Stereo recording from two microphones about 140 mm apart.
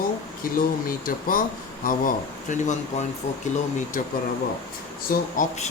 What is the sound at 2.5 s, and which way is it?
Speech, 65° left (ahead or behind).